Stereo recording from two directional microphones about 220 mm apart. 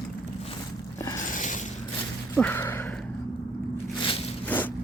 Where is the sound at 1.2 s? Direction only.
35° left (ahead or behind).